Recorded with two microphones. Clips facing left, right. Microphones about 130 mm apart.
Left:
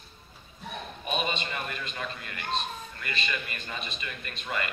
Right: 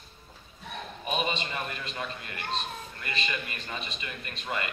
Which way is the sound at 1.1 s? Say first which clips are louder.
Even; 25° right (ahead or behind).